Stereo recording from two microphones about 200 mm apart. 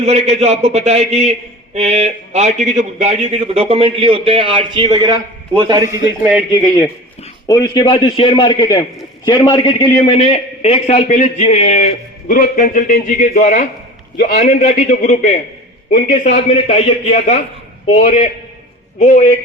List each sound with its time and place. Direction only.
0.0 s a man's voice: 30° right (ahead or behind)
6.1 s speech: 10° right (ahead or behind)
7.4 s a man's voice: 20° left (ahead or behind)
10.3 s a man's voice: 30° left (ahead or behind)